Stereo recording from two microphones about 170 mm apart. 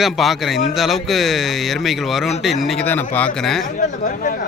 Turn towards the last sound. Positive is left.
turn(degrees=50)  # may be behind; listen again after turning